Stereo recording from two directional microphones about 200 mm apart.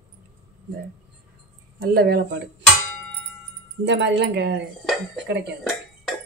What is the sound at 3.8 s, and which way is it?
Speech, 60° right (ahead or behind).